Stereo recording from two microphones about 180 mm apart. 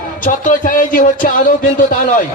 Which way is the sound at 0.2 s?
45° left (ahead or behind).